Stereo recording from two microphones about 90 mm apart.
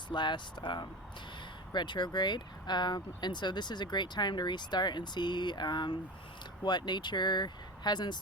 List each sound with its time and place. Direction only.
0.1 s speech: 60° left (ahead or behind)